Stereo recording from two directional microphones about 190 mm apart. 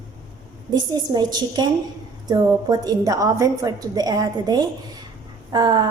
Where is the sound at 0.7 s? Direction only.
20° right (ahead or behind).